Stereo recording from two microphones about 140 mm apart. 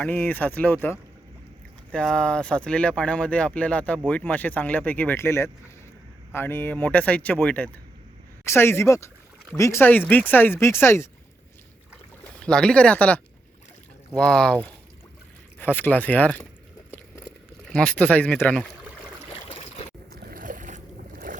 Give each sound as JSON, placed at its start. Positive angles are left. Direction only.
{"t": 0.0, "sound": "speech", "side_deg": 10}
{"t": 12.4, "sound": "speech", "side_deg": 5}
{"t": 17.7, "sound": "speech", "side_deg": 5}
{"t": 19.5, "sound": "boat", "side_deg": 40}
{"t": 20.1, "sound": "boat", "side_deg": -80}